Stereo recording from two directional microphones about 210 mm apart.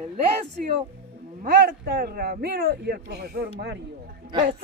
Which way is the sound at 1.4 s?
45° right (ahead or behind).